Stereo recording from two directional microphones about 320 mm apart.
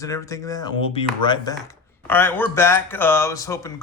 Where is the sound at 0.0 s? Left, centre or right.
Centre.